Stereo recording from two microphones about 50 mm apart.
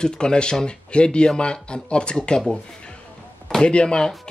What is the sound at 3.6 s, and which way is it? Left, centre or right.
Speech, centre.